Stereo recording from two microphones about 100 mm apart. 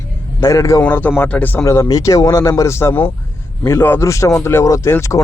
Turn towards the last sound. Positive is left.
turn(degrees=30)  # may be behind; listen again after turning